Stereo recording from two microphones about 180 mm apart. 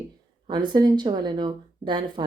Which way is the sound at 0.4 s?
25° right (ahead or behind).